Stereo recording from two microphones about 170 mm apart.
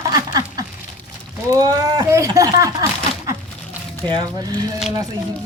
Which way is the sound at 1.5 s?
20° right (ahead or behind).